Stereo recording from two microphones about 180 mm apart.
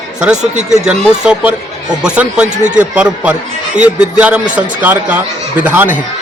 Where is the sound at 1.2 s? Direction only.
5° right (ahead or behind).